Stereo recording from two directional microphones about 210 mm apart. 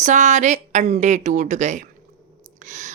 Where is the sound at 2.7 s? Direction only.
35° right (ahead or behind).